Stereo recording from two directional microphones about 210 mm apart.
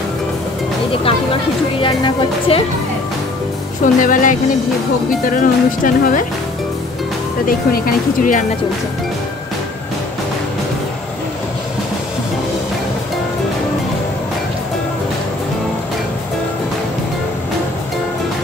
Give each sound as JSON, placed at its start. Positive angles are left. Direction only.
{"t": 1.8, "sound": "speech", "side_deg": 25}
{"t": 3.8, "sound": "speech", "side_deg": 40}
{"t": 7.4, "sound": "speech", "side_deg": 45}